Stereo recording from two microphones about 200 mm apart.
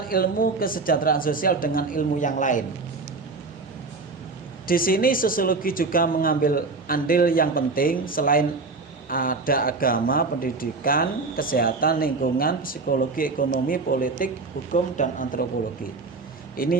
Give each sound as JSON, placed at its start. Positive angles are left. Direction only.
{"t": 0.1, "sound": "speech", "side_deg": 45}
{"t": 4.6, "sound": "a man's voice", "side_deg": 45}
{"t": 16.6, "sound": "speech", "side_deg": 45}